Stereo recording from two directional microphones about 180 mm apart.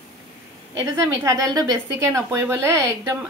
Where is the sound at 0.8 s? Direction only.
15° right (ahead or behind).